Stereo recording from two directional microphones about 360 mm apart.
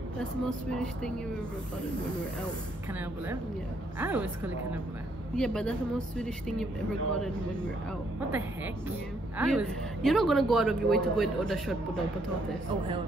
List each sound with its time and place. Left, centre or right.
0.2 s a man's voice: centre
4.0 s a man's voice: centre
5.3 s a man's voice: centre
9.4 s a man's voice: centre